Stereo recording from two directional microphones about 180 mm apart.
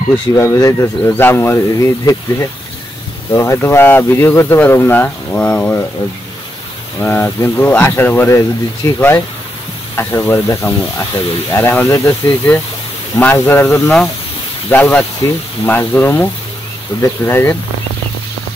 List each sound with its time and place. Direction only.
0.3 s speech: 20° left (ahead or behind)
7.0 s speech: 10° left (ahead or behind)